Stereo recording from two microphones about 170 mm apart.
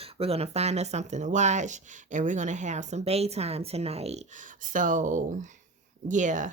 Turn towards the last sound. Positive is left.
turn(degrees=-45)  # may be behind; listen again after turning